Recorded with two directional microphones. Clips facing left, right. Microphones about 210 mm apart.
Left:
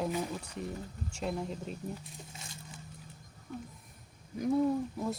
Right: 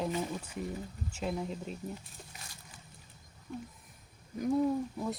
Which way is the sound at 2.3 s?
25° left (ahead or behind).